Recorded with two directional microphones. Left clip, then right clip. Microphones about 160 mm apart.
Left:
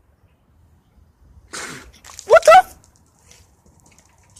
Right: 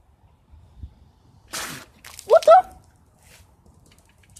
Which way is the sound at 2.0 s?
15° left (ahead or behind).